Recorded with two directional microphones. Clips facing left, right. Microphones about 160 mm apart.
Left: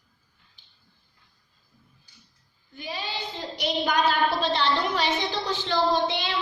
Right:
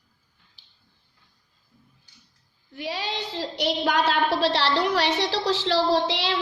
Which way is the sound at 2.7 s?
75° right (ahead or behind).